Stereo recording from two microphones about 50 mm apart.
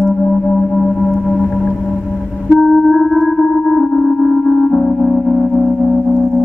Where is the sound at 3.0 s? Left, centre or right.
Centre.